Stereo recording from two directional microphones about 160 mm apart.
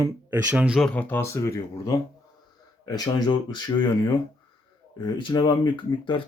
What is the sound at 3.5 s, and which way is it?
Speech, 25° left (ahead or behind).